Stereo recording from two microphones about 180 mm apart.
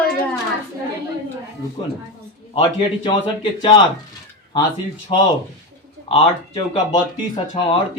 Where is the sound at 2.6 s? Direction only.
25° left (ahead or behind).